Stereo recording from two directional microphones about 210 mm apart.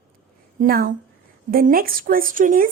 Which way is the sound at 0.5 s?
45° right (ahead or behind).